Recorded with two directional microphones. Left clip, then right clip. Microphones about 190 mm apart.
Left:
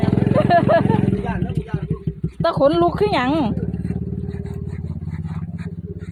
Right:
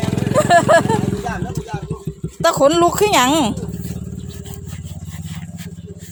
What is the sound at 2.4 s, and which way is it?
Speech, 15° right (ahead or behind).